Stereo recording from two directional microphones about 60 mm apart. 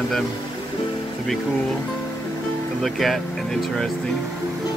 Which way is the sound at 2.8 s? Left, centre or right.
Centre.